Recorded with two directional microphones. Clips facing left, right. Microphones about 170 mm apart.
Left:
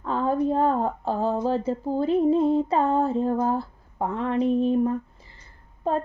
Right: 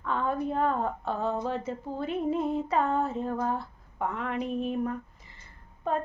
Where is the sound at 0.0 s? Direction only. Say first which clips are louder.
Left 6 dB; 35° left (ahead or behind).